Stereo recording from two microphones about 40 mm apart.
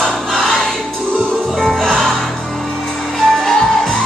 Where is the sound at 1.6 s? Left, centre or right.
Centre.